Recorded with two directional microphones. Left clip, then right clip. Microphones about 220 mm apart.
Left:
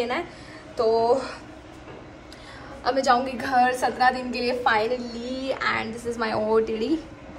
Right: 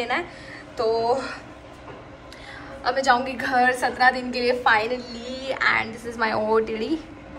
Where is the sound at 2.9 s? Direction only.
25° left (ahead or behind).